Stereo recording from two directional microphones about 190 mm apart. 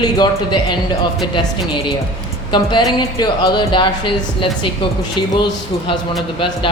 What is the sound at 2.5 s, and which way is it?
Speech, 25° left (ahead or behind).